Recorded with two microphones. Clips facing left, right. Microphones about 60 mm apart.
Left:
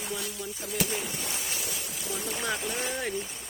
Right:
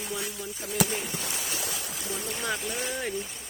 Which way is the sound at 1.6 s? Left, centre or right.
Right.